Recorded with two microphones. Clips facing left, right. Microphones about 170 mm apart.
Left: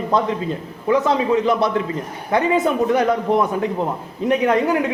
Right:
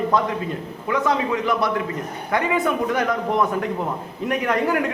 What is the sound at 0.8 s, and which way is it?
A man's voice, 25° left (ahead or behind).